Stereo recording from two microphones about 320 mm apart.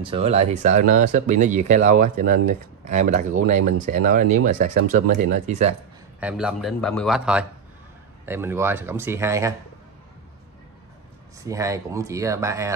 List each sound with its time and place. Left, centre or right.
0.0 s speech: centre
6.1 s speech: centre
11.3 s speech: centre